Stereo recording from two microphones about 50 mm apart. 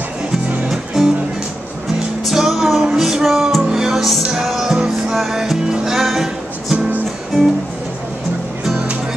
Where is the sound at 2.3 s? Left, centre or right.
Centre.